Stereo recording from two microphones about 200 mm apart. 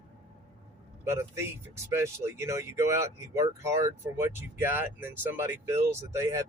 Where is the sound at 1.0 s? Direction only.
15° right (ahead or behind).